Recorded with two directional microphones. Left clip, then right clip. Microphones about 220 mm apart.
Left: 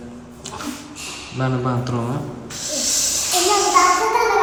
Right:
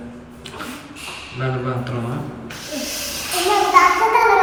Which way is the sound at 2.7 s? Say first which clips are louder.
Left 5 dB; centre (ahead or behind).